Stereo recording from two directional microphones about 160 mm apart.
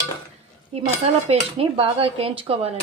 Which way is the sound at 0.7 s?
40° right (ahead or behind).